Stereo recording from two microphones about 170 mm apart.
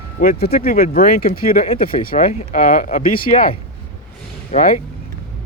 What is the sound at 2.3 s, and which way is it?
Speech, 45° left (ahead or behind).